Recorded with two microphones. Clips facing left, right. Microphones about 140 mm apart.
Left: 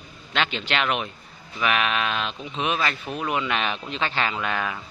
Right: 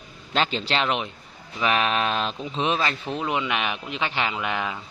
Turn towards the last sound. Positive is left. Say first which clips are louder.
# even
turn(degrees=-15)  # may be behind; listen again after turning